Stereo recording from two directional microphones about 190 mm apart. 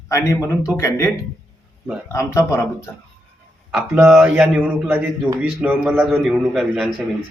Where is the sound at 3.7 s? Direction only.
5° right (ahead or behind).